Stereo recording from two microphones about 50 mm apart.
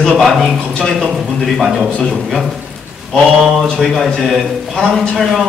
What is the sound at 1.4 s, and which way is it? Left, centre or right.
Speech, centre.